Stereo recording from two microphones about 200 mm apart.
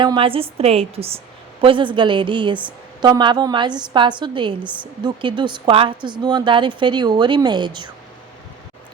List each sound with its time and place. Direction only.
0.0 s a woman's voice: 25° right (ahead or behind)